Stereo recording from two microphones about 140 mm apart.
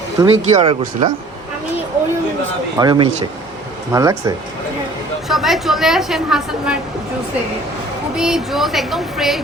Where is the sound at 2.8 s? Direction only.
35° right (ahead or behind).